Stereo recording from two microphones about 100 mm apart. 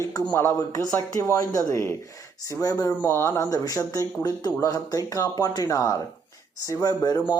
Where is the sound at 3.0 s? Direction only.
25° left (ahead or behind).